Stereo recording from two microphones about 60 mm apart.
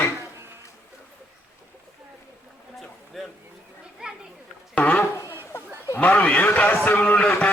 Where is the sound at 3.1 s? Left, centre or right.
Centre.